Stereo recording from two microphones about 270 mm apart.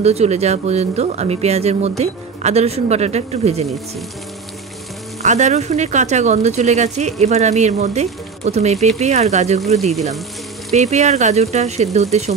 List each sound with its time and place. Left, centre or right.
0.0 s speech: right
5.2 s speech: right
10.7 s speech: right